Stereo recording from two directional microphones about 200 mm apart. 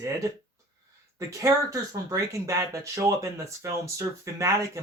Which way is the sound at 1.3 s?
15° right (ahead or behind).